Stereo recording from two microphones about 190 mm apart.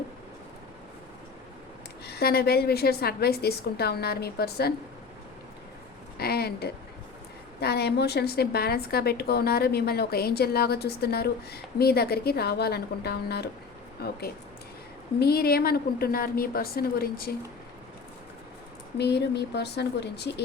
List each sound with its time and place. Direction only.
2.0 s a woman's voice: 55° left (ahead or behind)
6.1 s a woman's voice: 55° left (ahead or behind)
18.9 s a woman's voice: 60° left (ahead or behind)